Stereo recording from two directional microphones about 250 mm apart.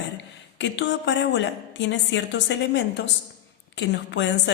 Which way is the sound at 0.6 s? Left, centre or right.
Left.